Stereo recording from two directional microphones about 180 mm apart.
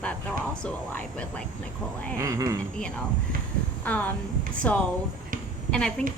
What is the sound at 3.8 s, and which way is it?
A woman's voice, 10° left (ahead or behind).